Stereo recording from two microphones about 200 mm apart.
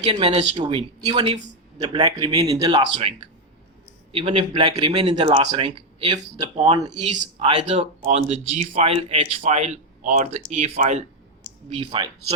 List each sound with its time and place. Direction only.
0.0 s a man's voice: 25° right (ahead or behind)
2.6 s a man's voice: 25° right (ahead or behind)